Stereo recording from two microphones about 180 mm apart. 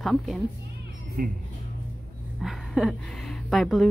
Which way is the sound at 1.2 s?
50° right (ahead or behind).